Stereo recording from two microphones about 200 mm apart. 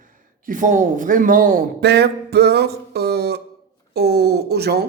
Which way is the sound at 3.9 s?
55° right (ahead or behind).